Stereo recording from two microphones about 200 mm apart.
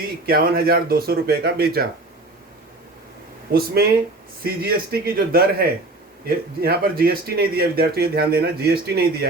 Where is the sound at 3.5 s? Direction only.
50° right (ahead or behind).